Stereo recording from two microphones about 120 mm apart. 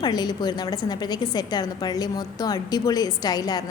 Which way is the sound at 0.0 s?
35° left (ahead or behind).